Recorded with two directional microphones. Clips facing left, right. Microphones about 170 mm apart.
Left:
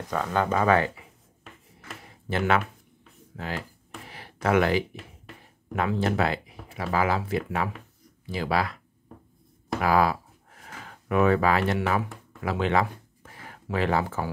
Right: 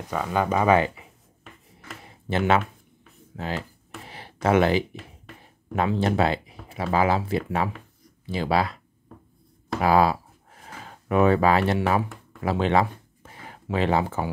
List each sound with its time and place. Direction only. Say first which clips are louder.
0.1 s speech: right 1 dB; 10° right (ahead or behind)
2.2 s speech: right 3 dB; 25° right (ahead or behind)
4.1 s a sound: right 2 dB; 25° right (ahead or behind)
5.8 s speech: right 3 dB; 25° right (ahead or behind)